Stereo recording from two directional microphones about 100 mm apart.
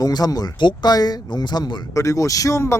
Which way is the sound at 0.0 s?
40° left (ahead or behind).